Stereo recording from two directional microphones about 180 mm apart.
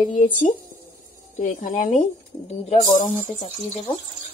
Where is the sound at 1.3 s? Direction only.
50° left (ahead or behind).